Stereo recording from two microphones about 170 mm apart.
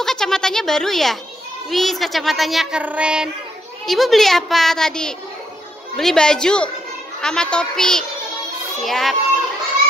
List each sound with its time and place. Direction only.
0.0 s speech: 5° left (ahead or behind)